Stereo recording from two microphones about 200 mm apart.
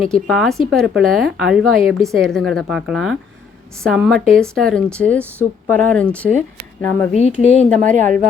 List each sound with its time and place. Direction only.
0.1 s a woman's voice: centre (ahead or behind)
7.1 s a woman's voice: 35° left (ahead or behind)
7.8 s speech: 40° right (ahead or behind)